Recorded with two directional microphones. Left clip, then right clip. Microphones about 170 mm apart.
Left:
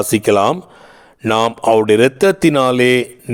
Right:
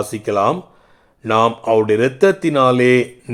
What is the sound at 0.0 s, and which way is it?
A man's voice, 45° left (ahead or behind).